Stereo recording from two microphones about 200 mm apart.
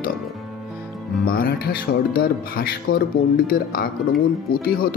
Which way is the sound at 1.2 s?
45° left (ahead or behind).